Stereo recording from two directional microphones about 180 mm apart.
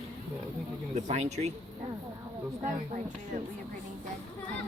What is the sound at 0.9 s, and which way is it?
Speech, 40° right (ahead or behind).